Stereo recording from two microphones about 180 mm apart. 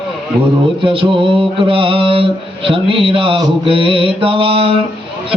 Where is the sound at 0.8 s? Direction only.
30° right (ahead or behind).